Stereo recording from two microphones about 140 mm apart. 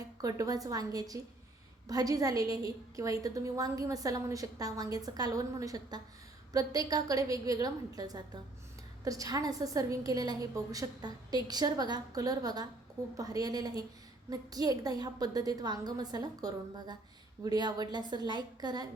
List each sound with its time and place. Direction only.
0.2 s a woman's voice: 25° right (ahead or behind)